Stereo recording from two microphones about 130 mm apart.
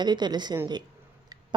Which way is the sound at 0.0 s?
35° right (ahead or behind).